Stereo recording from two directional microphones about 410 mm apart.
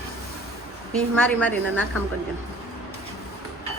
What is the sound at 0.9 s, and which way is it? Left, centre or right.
Speech, centre.